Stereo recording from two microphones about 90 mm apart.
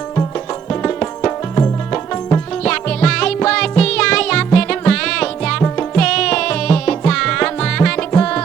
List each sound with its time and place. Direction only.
0.7 s music: 15° left (ahead or behind)